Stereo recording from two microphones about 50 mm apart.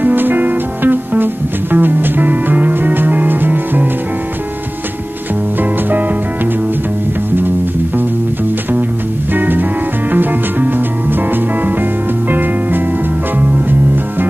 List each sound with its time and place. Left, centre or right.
0.0 s music: right
5.6 s music: right
9.3 s music: right